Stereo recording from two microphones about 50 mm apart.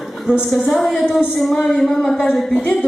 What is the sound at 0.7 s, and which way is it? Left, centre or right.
A woman's voice, centre.